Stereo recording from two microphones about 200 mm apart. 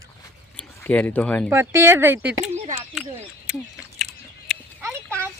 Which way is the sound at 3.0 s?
5° right (ahead or behind).